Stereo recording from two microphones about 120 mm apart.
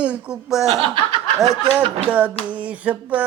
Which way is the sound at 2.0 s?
10° right (ahead or behind).